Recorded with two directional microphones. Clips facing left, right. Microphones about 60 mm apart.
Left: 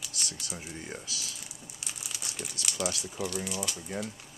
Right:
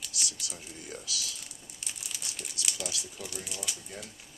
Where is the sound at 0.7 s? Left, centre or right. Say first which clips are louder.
Right 2 dB; left.